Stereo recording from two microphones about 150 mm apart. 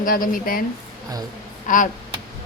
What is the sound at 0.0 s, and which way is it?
Speech, 65° left (ahead or behind).